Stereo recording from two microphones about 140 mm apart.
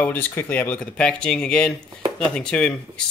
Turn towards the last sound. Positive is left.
turn(degrees=5)  # may be behind; listen again after turning